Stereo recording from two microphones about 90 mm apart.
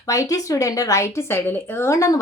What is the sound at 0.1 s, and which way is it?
Speech, 40° left (ahead or behind).